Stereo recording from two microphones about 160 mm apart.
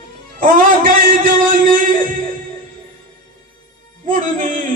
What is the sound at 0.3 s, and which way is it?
Music, 60° right (ahead or behind).